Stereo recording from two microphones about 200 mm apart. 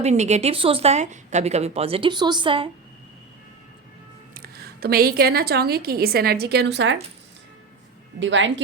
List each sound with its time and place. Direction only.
0.0 s a woman's voice: 35° right (ahead or behind)
4.4 s a woman's voice: 50° right (ahead or behind)
8.2 s speech: 70° right (ahead or behind)